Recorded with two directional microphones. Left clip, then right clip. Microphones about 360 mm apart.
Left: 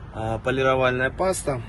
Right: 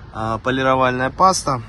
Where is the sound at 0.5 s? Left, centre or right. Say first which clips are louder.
Right 3 dB; centre.